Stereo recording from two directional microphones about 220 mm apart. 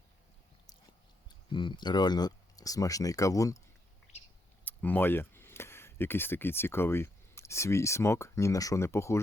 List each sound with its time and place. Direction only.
1.5 s speech: 20° left (ahead or behind)
4.6 s speech: 10° left (ahead or behind)